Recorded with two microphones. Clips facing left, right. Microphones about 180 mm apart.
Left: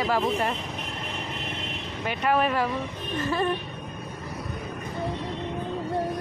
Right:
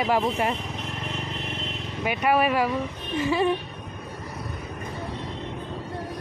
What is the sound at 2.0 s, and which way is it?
Speech, 10° right (ahead or behind).